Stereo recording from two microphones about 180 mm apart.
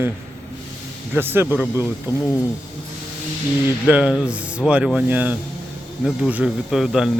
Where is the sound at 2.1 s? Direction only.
25° left (ahead or behind).